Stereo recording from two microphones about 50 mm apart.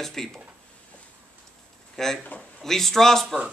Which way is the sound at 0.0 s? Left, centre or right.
Centre.